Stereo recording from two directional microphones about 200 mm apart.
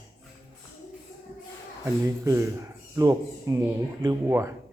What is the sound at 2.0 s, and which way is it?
Speech, 15° right (ahead or behind).